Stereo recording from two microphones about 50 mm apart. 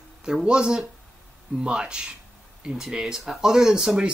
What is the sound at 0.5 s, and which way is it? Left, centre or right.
Speech, centre.